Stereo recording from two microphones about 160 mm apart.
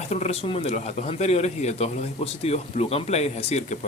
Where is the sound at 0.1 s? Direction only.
40° left (ahead or behind).